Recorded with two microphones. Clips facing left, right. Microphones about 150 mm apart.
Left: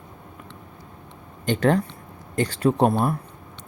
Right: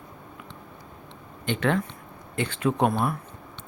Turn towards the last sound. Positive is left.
turn(degrees=30)  # may be behind; listen again after turning